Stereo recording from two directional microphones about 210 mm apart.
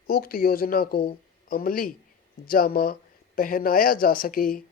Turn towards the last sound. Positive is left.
turn(degrees=40)  # may be behind; listen again after turning